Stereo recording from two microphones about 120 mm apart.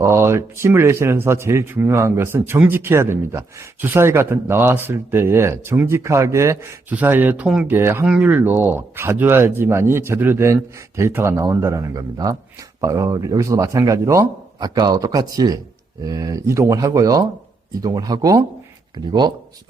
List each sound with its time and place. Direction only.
0.0 s speech: 20° right (ahead or behind)
7.8 s speech: 20° right (ahead or behind)
8.0 s speech: 10° right (ahead or behind); by 19.3 s 35° right (ahead or behind)